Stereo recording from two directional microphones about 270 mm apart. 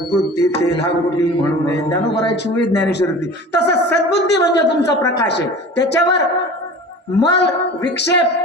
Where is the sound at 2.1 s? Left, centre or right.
Left.